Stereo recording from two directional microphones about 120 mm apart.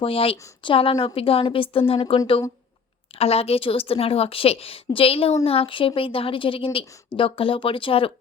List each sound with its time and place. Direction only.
0.0 s speech: 50° left (ahead or behind)